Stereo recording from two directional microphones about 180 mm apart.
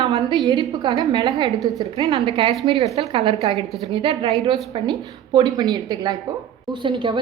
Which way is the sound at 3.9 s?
35° right (ahead or behind).